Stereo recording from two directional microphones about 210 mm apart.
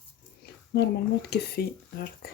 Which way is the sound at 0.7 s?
50° left (ahead or behind).